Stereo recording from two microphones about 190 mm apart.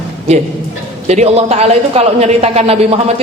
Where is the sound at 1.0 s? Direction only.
35° right (ahead or behind).